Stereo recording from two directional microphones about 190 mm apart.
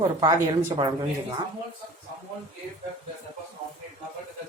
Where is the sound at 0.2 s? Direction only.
20° right (ahead or behind).